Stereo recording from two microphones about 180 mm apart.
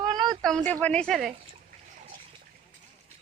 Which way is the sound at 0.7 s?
10° left (ahead or behind).